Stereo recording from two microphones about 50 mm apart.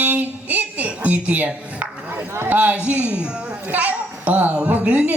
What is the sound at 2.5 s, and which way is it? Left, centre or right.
A man's voice, right.